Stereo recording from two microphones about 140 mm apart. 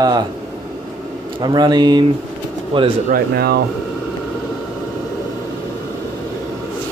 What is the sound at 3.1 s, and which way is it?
Speech, 90° right.